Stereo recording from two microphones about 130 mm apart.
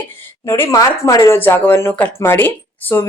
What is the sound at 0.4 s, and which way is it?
Speech, 20° left (ahead or behind).